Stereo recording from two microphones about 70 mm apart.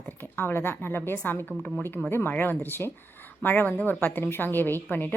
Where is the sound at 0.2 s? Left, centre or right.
Left.